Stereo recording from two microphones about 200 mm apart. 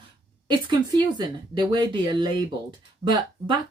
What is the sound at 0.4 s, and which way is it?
Speech, 20° right (ahead or behind).